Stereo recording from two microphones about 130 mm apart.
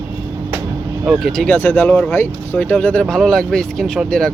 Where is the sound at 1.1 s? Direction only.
Centre (ahead or behind).